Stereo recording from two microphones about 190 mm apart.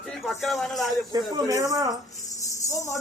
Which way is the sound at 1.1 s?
20° right (ahead or behind).